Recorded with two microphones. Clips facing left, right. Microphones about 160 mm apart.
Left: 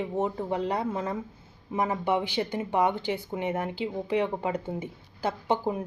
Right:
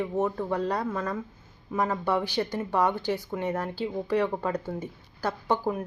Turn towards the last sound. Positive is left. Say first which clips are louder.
# even
turn(degrees=20)  # may be behind; listen again after turning